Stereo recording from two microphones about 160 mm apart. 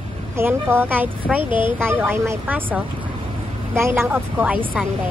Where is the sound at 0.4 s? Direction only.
15° right (ahead or behind).